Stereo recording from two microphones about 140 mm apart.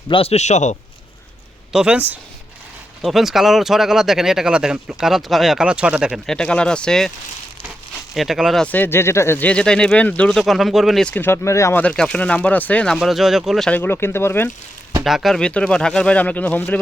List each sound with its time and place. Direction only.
0.1 s a man's voice: 45° left (ahead or behind)
1.7 s speech: 5° right (ahead or behind)
6.2 s speech: 5° left (ahead or behind)
8.1 s speech: centre (ahead or behind)
8.6 s speech: 15° left (ahead or behind)
11.1 s speech: 15° left (ahead or behind)
11.8 s speech: 5° left (ahead or behind)
13.7 s speech: 15° left (ahead or behind)
15.0 s speech: centre (ahead or behind)